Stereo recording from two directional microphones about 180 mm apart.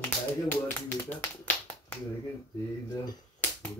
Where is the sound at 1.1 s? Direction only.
10° left (ahead or behind).